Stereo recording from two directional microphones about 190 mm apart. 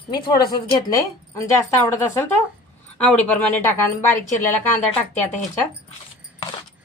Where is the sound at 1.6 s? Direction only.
15° left (ahead or behind).